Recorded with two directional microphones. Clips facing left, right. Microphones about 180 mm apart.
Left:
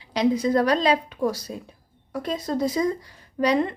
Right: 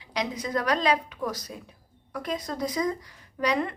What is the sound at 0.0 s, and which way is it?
A woman's voice, 30° left (ahead or behind).